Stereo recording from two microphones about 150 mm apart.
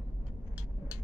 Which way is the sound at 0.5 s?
10° right (ahead or behind).